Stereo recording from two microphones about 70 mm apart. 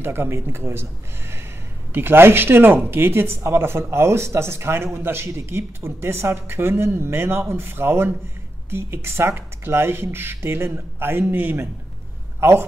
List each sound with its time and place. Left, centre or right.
0.0 s speech: right
2.0 s a man's voice: right